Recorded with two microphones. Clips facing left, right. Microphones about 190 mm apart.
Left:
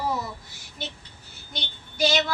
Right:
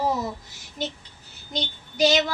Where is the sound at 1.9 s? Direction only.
15° right (ahead or behind).